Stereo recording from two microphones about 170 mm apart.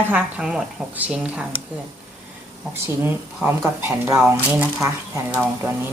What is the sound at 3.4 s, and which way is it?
A woman's voice, 15° right (ahead or behind).